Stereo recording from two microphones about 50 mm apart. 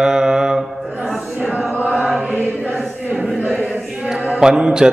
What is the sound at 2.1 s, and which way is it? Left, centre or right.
Choir, centre.